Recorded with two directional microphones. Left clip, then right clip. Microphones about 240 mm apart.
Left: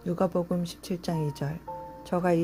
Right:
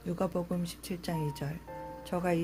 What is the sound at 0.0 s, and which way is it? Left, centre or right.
A woman's voice, centre.